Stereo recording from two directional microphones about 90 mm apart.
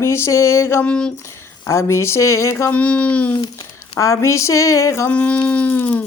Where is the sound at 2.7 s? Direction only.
15° left (ahead or behind).